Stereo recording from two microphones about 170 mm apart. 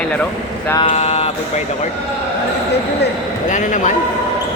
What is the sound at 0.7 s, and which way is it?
Speech, 35° left (ahead or behind).